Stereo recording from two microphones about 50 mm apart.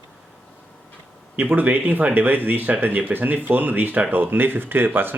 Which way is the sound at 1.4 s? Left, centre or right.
Right.